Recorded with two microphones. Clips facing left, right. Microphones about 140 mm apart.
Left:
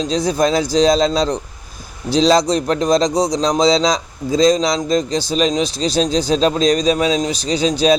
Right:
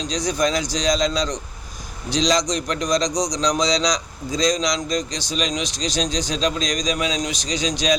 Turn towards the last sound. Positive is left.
turn(degrees=35)  # may be behind; listen again after turning